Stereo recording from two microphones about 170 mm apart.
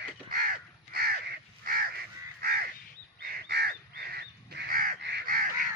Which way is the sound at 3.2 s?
65° right (ahead or behind).